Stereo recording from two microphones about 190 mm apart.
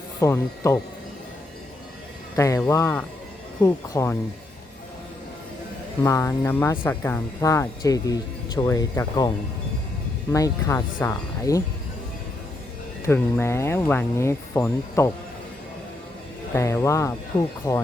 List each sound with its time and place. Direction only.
0.2 s speech: 15° left (ahead or behind)
2.3 s speech: 15° left (ahead or behind)
6.1 s speech: 15° left (ahead or behind)
10.3 s speech: 15° left (ahead or behind)
13.1 s speech: 10° left (ahead or behind)
16.6 s speech: 15° left (ahead or behind)